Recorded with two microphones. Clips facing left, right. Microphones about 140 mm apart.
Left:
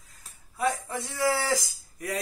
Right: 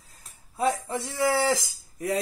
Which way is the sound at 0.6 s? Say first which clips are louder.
Right 2 dB; 30° right (ahead or behind).